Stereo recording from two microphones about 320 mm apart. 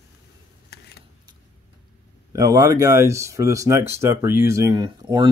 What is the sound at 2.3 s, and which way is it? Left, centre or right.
Speech, centre.